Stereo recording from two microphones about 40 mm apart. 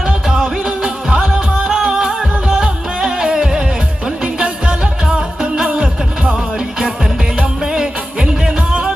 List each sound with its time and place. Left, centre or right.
0.0 s music: centre
1.7 s music: centre
6.7 s music: centre